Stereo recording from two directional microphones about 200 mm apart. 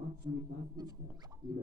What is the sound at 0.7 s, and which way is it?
Rodents, 20° right (ahead or behind).